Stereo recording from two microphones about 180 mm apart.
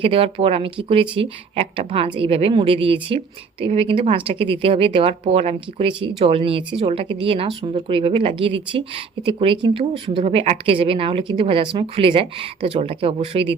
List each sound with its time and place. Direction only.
0.0 s speech: 30° right (ahead or behind)